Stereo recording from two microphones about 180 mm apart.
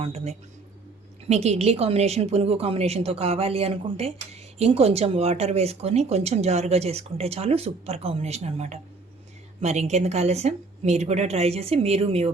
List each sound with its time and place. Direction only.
0.0 s speech: 35° right (ahead or behind)